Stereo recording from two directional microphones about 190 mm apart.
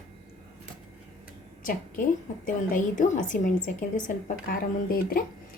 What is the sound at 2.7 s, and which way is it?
A woman's voice, 40° left (ahead or behind).